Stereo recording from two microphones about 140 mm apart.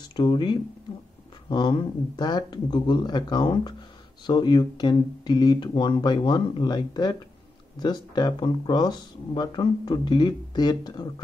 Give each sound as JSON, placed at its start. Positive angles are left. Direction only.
{"t": 0.1, "sound": "speech", "side_deg": 35}